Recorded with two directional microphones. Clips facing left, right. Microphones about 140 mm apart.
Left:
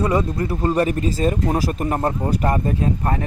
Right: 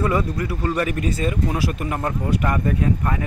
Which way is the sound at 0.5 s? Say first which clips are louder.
Left 4 dB; 35° left (ahead or behind).